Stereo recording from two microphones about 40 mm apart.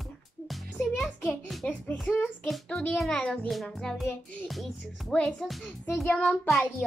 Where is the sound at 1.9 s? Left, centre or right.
Left.